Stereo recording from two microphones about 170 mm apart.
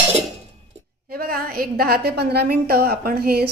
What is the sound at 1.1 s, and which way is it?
A woman's voice, 60° right (ahead or behind).